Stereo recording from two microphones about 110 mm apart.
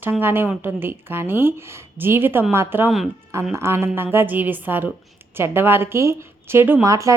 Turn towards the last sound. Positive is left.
turn(degrees=-30)  # may be behind; listen again after turning